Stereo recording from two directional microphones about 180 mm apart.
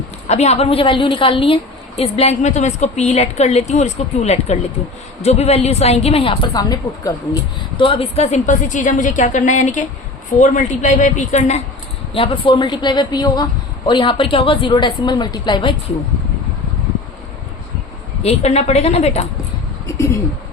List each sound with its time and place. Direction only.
0.3 s a woman's voice: 40° left (ahead or behind); by 7.1 s 20° left (ahead or behind)
7.8 s a woman's voice: 30° left (ahead or behind)
18.2 s a woman's voice: 35° left (ahead or behind)